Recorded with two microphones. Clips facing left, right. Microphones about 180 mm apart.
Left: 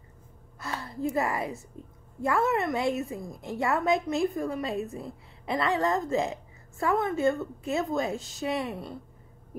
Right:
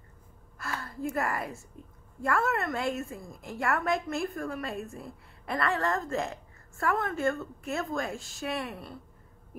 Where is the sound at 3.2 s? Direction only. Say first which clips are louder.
Even; 20° left (ahead or behind).